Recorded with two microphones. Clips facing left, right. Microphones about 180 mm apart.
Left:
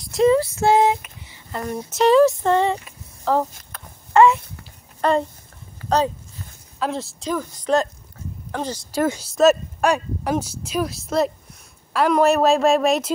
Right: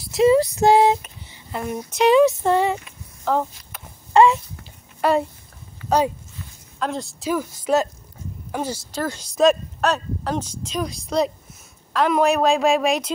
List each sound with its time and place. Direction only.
0.0 s female singing: 5° right (ahead or behind)
0.4 s female singing: 15° right (ahead or behind)
0.7 s a sound: 30° right (ahead or behind)
1.5 s speech: 10° right (ahead or behind)
1.9 s speech: centre (ahead or behind)
4.1 s a sound: 15° right (ahead or behind)
5.0 s a child's voice: 5° right (ahead or behind)
6.8 s speech: centre (ahead or behind)
9.1 s speech: 5° left (ahead or behind)